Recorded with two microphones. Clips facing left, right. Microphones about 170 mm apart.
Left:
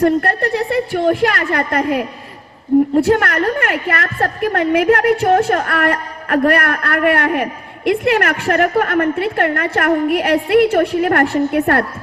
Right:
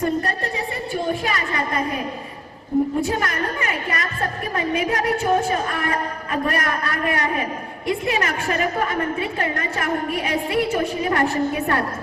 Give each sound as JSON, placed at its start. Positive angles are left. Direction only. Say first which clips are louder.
{"t": 0.0, "sound": "a woman's voice", "louder": "left 8 dB", "side_deg": 70}